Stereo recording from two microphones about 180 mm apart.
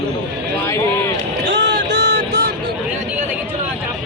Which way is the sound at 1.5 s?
80° right.